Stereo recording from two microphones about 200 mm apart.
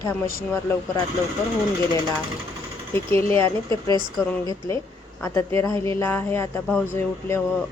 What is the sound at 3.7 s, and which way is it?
Speech, 20° right (ahead or behind).